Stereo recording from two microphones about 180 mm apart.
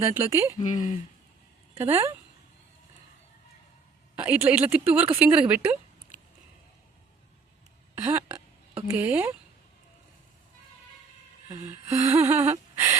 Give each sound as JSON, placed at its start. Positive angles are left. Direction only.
{"t": 0.0, "sound": "a woman's voice", "side_deg": -15}
{"t": 0.6, "sound": "speech", "side_deg": 45}
{"t": 1.7, "sound": "a sound", "side_deg": -35}
{"t": 4.1, "sound": "a woman's voice", "side_deg": -10}
{"t": 7.9, "sound": "speech", "side_deg": -10}
{"t": 11.6, "sound": "a sound", "side_deg": -35}
{"t": 12.3, "sound": "gasp", "side_deg": -15}